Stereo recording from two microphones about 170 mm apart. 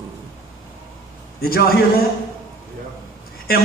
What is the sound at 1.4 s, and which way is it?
Speech, 65° left (ahead or behind).